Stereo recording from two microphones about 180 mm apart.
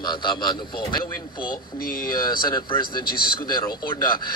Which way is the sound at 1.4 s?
55° left (ahead or behind).